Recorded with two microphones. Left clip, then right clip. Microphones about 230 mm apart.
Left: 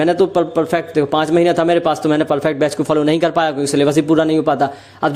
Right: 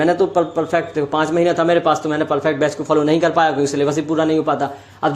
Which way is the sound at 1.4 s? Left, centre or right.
Left.